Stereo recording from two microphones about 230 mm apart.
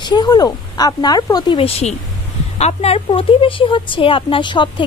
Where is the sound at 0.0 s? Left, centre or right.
Centre.